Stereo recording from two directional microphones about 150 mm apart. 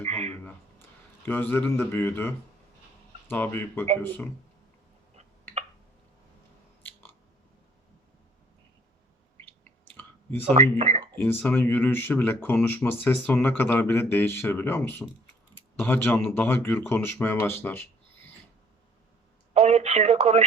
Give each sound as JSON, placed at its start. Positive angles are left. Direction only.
{"t": 0.0, "sound": "a sound", "side_deg": -45}
{"t": 0.4, "sound": "a man's voice", "side_deg": 10}
{"t": 6.8, "sound": "biting", "side_deg": 15}
{"t": 10.5, "sound": "speech", "side_deg": -45}
{"t": 11.2, "sound": "speech", "side_deg": 10}
{"t": 19.5, "sound": "speech", "side_deg": -45}